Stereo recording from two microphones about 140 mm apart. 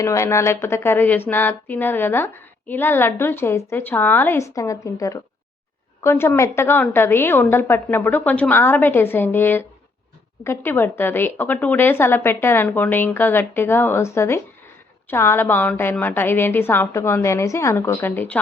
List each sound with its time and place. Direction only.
0.0 s a woman's voice: 20° left (ahead or behind)